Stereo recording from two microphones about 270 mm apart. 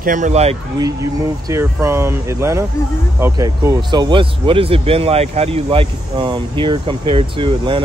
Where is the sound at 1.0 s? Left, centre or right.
Centre.